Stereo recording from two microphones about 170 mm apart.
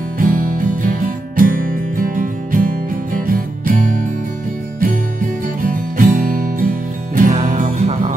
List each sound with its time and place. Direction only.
0.2 s music: 55° right (ahead or behind)